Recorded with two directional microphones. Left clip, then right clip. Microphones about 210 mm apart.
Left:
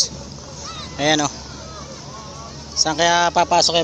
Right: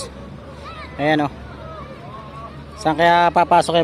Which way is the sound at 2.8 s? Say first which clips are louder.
Right 3 dB; 15° right (ahead or behind).